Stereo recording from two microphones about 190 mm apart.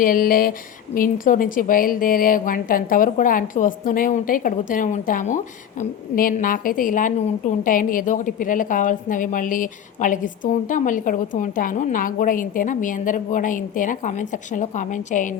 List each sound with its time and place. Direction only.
0.0 s a woman's voice: 50° left (ahead or behind)